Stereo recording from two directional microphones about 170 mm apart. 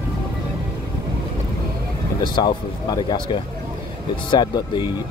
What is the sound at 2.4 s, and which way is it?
Speech, 25° left (ahead or behind).